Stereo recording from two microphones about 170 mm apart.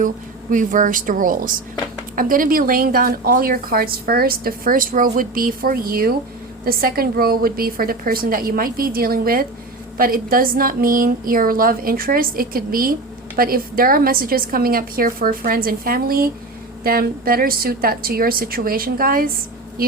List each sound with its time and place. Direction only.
0.5 s a woman's voice: 50° right (ahead or behind)